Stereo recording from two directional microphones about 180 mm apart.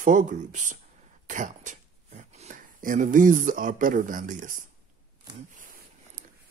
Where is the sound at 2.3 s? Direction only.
45° right (ahead or behind).